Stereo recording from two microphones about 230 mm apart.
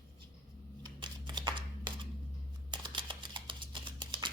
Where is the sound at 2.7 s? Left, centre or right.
Centre.